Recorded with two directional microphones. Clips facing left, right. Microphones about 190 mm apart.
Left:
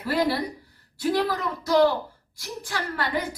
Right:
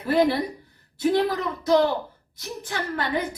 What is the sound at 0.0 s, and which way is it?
A woman's voice, 20° right (ahead or behind).